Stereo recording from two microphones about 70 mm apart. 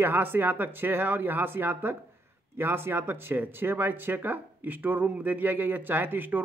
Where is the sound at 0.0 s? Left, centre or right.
Right.